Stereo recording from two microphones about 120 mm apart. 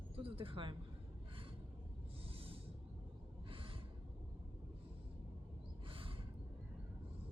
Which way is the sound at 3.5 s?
45° right (ahead or behind).